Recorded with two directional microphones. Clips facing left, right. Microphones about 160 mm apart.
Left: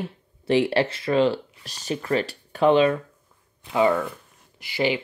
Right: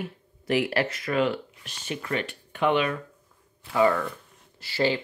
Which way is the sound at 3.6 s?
20° left (ahead or behind).